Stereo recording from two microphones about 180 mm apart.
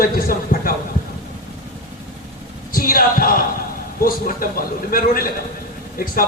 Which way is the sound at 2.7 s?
50° left (ahead or behind).